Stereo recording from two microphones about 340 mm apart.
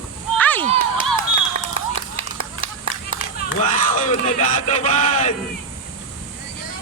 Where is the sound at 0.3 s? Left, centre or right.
Centre.